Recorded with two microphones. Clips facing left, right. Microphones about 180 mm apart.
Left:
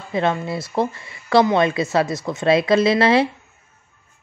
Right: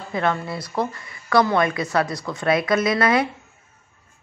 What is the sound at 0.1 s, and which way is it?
Speech, 25° left (ahead or behind).